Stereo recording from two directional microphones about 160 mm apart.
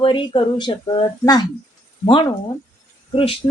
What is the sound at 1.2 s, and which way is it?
Speech, 25° left (ahead or behind).